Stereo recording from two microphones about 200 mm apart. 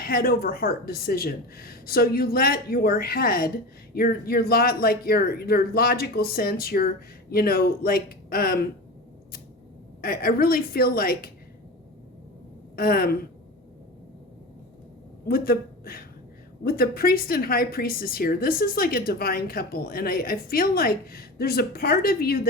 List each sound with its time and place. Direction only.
0.0 s a woman's voice: 50° left (ahead or behind)
10.0 s a woman's voice: 45° left (ahead or behind)
12.7 s a woman's voice: 50° left (ahead or behind)
15.3 s a woman's voice: 50° left (ahead or behind)